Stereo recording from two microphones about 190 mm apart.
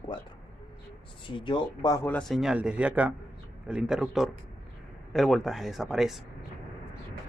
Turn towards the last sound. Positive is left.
turn(degrees=0)  # may be behind; listen again after turning